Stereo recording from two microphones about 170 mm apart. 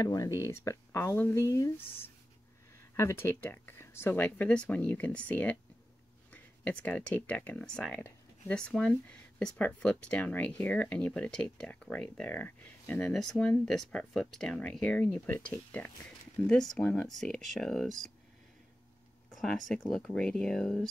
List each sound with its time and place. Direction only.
0.0 s speech: 20° left (ahead or behind); by 18.1 s centre (ahead or behind)
19.3 s a sound: centre (ahead or behind)
19.7 s speech: 5° left (ahead or behind)